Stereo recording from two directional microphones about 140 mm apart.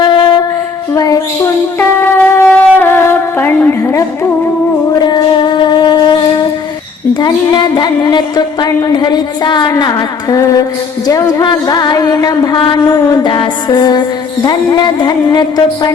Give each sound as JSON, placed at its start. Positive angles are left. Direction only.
{"t": 0.0, "sound": "a sound", "side_deg": 35}
{"t": 1.8, "sound": "shofar", "side_deg": 20}
{"t": 5.0, "sound": "shofar", "side_deg": 35}
{"t": 7.1, "sound": "music", "side_deg": 30}